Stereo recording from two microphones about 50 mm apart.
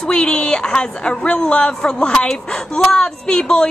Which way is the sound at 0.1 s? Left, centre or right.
Centre.